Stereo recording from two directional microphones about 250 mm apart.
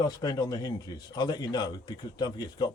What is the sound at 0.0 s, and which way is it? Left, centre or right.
Speech, centre.